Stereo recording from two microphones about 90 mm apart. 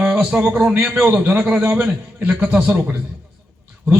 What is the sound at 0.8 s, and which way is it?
Speech, 5° right (ahead or behind).